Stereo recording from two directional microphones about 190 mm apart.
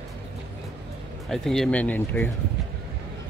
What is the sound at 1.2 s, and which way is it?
Speech, centre (ahead or behind).